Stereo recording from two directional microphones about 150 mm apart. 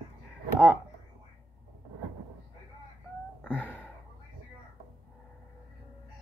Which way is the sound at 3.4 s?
15° left (ahead or behind).